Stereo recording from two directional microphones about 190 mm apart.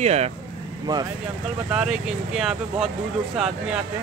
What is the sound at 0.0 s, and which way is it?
Speech, 35° right (ahead or behind).